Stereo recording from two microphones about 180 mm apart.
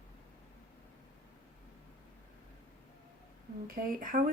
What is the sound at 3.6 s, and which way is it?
Speech, 50° right (ahead or behind).